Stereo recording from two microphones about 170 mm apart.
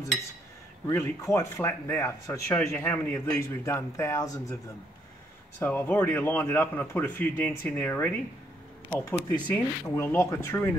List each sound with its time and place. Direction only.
0.8 s speech: 15° left (ahead or behind)
5.6 s speech: 10° left (ahead or behind)
9.5 s speech: 15° left (ahead or behind)